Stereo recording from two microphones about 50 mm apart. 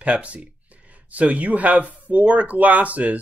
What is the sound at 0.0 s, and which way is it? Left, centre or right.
Speech, right.